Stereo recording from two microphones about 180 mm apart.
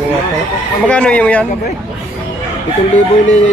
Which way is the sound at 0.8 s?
5° left (ahead or behind).